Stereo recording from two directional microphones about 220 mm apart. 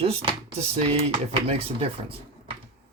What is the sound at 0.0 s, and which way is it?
Speech, 25° right (ahead or behind).